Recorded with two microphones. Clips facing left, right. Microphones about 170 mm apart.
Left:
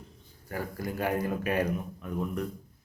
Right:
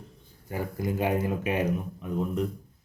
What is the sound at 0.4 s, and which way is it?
Speech, 20° right (ahead or behind).